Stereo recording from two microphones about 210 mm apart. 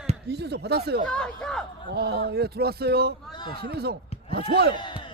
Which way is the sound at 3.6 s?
50° right (ahead or behind).